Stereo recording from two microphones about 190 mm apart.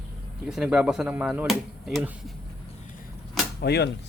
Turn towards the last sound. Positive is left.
turn(degrees=60)  # may be behind; listen again after turning